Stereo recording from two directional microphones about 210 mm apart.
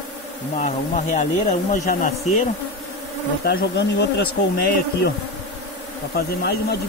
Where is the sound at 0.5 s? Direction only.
35° left (ahead or behind).